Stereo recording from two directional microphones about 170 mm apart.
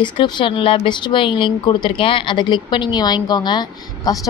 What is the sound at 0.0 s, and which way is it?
A woman's voice, 30° left (ahead or behind).